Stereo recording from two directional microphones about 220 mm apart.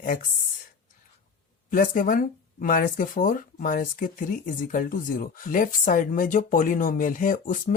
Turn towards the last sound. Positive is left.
turn(degrees=40)  # may be behind; listen again after turning